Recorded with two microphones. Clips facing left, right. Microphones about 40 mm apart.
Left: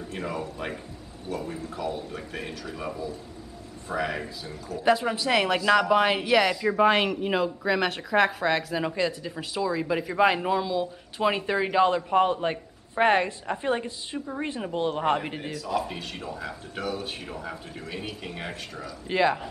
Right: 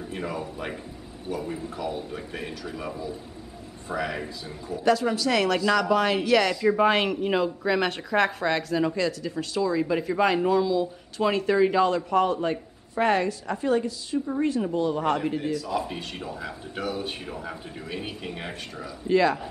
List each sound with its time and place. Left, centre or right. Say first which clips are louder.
0.1 s a man's voice: even; centre
1.3 s a man's voice: right 1 dB; centre
3.9 s a man's voice: even; centre
4.8 s a woman's voice: right 1 dB; left
15.7 s a man's voice: even; centre
19.0 s a woman's voice: right 2 dB; left